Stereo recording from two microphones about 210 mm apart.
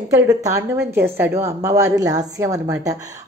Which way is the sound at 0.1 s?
15° right (ahead or behind).